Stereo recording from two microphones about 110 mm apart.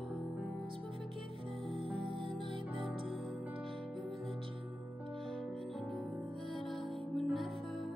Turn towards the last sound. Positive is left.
turn(degrees=0)  # may be behind; listen again after turning